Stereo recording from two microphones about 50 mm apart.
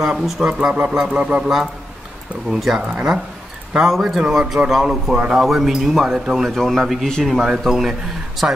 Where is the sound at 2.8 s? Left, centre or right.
Centre.